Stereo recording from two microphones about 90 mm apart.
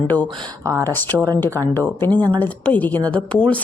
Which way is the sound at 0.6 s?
30° right (ahead or behind).